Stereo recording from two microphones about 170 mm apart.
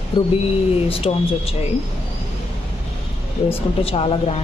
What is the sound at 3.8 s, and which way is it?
Speech, 35° left (ahead or behind).